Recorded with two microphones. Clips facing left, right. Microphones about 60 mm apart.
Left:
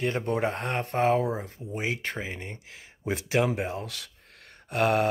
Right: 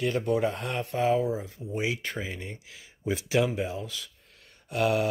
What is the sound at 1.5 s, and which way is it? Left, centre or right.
Speech, left.